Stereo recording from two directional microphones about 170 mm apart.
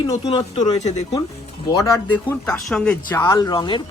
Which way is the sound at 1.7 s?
20° left (ahead or behind).